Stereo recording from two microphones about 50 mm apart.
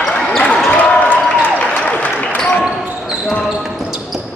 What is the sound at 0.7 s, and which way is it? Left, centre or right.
Applause, left.